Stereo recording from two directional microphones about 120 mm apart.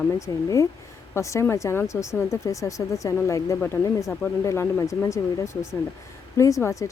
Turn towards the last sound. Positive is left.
turn(degrees=25)  # may be behind; listen again after turning